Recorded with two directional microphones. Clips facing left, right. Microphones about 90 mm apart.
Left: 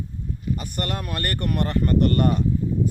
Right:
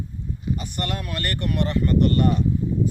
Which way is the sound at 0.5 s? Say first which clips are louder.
Even; 45° left (ahead or behind).